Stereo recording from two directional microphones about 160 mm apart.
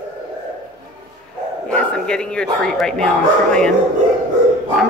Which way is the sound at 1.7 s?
5° left (ahead or behind).